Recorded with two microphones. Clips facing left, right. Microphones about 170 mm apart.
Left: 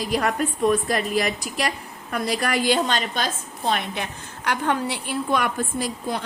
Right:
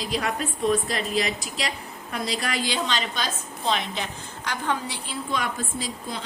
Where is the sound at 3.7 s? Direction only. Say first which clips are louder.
Left 1 dB; 55° left (ahead or behind).